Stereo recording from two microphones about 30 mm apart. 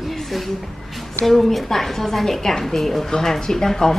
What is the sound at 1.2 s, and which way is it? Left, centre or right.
Speech, centre.